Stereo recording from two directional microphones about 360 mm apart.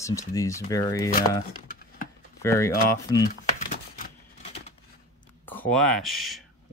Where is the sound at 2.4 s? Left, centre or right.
Centre.